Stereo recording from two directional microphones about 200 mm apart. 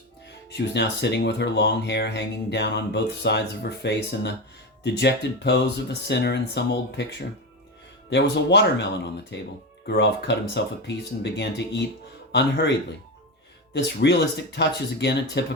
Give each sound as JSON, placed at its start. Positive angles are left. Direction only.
{"t": 0.5, "sound": "speech", "side_deg": 60}
{"t": 8.1, "sound": "speech", "side_deg": 60}
{"t": 13.7, "sound": "speech", "side_deg": 60}